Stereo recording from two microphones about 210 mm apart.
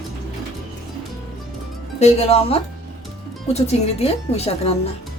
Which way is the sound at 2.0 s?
30° left (ahead or behind).